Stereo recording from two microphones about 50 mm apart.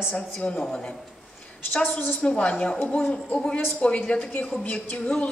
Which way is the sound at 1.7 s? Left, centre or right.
Left.